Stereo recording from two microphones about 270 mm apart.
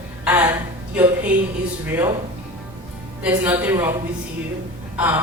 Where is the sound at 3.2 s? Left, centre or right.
Centre.